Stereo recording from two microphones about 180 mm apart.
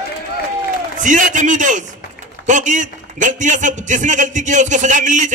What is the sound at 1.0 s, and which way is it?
A man's voice, 45° right (ahead or behind).